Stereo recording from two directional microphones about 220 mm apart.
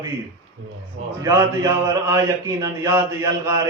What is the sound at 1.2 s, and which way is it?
A man's voice, 15° right (ahead or behind).